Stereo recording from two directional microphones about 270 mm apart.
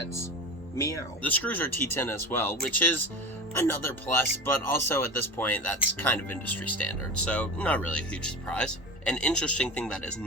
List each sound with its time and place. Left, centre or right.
0.8 s speech: centre